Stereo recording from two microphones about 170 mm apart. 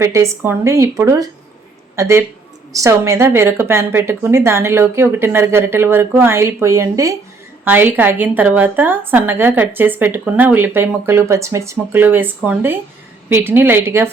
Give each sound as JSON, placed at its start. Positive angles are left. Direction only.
{"t": 0.0, "sound": "a woman's voice", "side_deg": -15}